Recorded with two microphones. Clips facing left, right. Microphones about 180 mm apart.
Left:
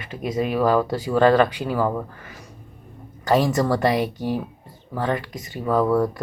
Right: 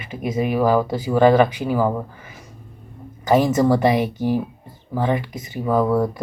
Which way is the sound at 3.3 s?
10° right (ahead or behind).